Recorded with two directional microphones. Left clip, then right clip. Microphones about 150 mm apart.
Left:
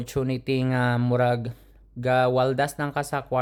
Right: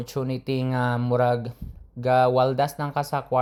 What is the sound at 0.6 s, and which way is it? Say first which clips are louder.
Speech: even; 45° left (ahead or behind).